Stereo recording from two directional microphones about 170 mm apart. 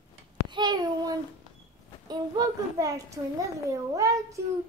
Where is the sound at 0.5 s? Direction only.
25° right (ahead or behind).